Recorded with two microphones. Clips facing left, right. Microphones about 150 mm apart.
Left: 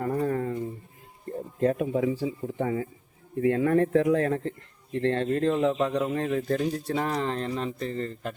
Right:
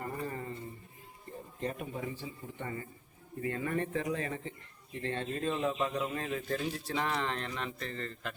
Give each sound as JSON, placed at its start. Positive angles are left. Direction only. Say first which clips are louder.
{"t": 0.0, "sound": "a sound", "louder": "left 11 dB", "side_deg": 85}
{"t": 1.6, "sound": "speech", "louder": "left 13 dB", "side_deg": 90}
{"t": 3.4, "sound": "speech", "louder": "left 12 dB", "side_deg": 75}